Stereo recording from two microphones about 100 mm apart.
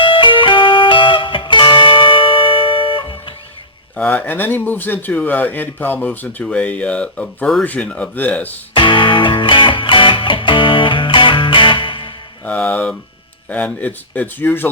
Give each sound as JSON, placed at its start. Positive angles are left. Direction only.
{"t": 0.0, "sound": "music", "side_deg": 55}
{"t": 3.9, "sound": "speech", "side_deg": 15}
{"t": 8.7, "sound": "music", "side_deg": 55}
{"t": 12.5, "sound": "speech", "side_deg": 15}